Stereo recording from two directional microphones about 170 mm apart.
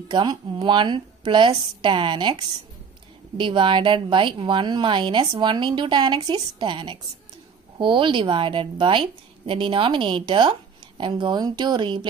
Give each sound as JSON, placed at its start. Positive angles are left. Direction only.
{"t": 0.1, "sound": "a woman's voice", "side_deg": -25}